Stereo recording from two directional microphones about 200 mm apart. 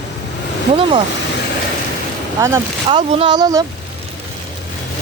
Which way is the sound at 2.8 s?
30° right (ahead or behind).